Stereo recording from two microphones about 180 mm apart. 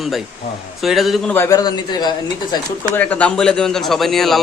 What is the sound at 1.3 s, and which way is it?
Speech, 15° left (ahead or behind).